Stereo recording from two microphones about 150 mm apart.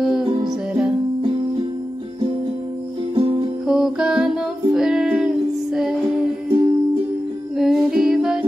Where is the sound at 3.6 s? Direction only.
5° right (ahead or behind).